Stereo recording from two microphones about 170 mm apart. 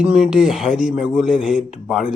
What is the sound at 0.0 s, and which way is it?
Speech, 5° right (ahead or behind).